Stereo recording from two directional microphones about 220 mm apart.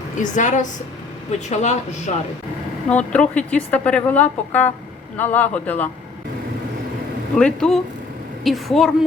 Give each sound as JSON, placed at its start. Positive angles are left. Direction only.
{"t": 0.2, "sound": "speech", "side_deg": 35}
{"t": 2.9, "sound": "a woman's voice", "side_deg": 5}
{"t": 7.3, "sound": "speech", "side_deg": 5}